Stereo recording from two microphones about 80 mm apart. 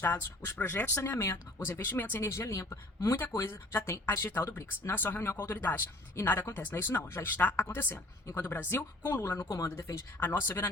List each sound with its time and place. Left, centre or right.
0.0 s speech: left
2.3 s speech: left